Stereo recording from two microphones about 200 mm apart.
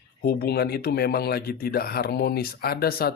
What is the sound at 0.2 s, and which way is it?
A man's voice, 50° left (ahead or behind).